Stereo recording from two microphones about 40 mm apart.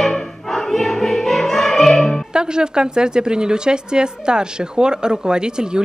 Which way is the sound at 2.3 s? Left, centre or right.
Right.